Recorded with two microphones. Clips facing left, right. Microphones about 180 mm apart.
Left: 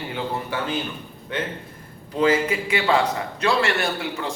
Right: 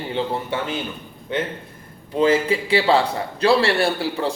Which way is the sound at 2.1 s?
25° right (ahead or behind).